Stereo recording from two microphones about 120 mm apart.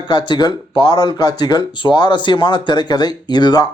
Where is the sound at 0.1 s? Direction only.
40° left (ahead or behind).